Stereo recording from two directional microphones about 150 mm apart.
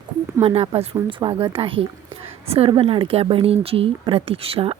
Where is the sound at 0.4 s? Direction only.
40° right (ahead or behind).